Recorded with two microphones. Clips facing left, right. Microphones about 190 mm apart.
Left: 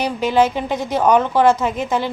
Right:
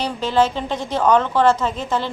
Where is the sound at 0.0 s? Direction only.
10° left (ahead or behind).